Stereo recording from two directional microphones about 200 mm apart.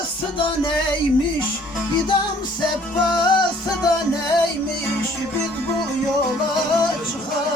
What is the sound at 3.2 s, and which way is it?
Music, 20° left (ahead or behind).